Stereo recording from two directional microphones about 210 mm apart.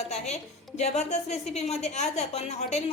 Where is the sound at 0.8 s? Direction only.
30° left (ahead or behind).